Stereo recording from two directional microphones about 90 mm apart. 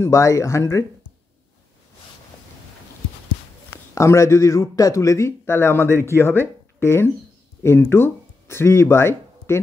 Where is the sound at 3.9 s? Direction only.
35° left (ahead or behind).